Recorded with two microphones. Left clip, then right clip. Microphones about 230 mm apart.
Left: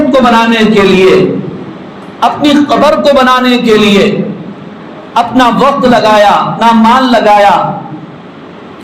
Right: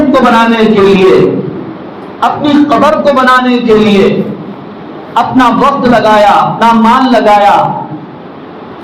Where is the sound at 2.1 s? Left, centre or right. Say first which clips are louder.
Left 1 dB; left.